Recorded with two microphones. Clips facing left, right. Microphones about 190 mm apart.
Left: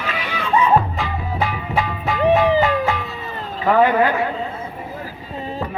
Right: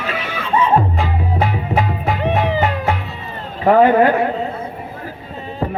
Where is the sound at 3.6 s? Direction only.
35° right (ahead or behind).